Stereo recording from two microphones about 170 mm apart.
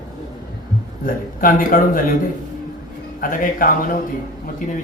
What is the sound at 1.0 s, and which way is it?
A man's voice, 55° left (ahead or behind).